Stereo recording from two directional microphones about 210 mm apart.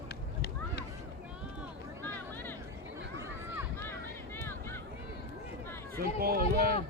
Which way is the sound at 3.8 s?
10° left (ahead or behind).